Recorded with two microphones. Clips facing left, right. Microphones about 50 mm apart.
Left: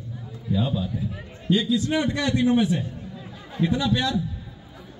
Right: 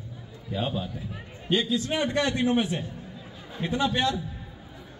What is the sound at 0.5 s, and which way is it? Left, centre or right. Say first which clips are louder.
A man's voice: left 4 dB; right.